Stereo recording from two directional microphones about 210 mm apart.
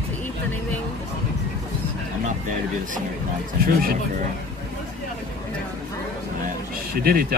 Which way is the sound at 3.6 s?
45° right (ahead or behind).